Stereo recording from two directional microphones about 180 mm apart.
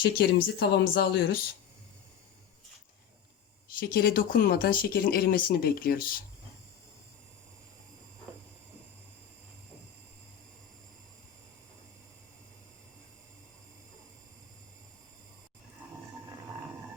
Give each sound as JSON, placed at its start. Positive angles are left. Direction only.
{"t": 0.0, "sound": "speech", "side_deg": 60}
{"t": 3.8, "sound": "speech", "side_deg": 55}